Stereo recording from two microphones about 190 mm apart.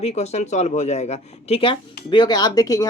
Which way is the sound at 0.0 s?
35° left (ahead or behind).